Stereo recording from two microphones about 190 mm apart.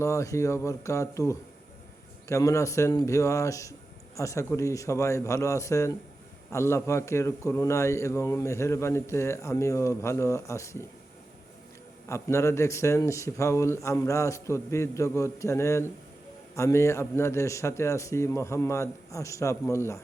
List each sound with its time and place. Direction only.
0.0 s speech: 15° left (ahead or behind)
12.0 s speech: 15° left (ahead or behind)